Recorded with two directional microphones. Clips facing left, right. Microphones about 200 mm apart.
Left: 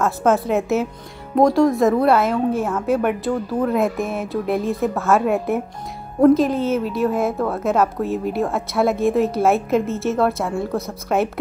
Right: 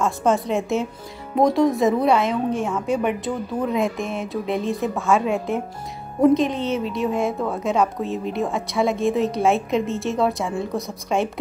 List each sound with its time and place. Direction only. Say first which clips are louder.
0.0 s a woman's voice: left 2 dB; 5° left (ahead or behind)
5.2 s speech: left 3 dB; 55° left (ahead or behind)
6.2 s a woman's voice: left 3 dB; centre (ahead or behind)